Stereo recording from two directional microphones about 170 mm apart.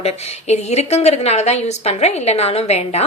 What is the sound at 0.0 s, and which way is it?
A woman's voice, 40° left (ahead or behind).